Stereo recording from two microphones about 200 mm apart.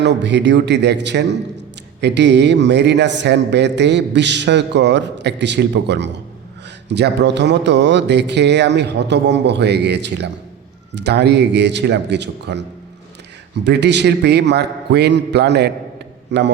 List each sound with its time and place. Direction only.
0.0 s a man's voice: 60° right (ahead or behind)
13.7 s a man's voice: 60° right (ahead or behind)